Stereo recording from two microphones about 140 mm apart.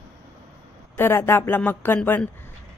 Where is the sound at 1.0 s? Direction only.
15° left (ahead or behind).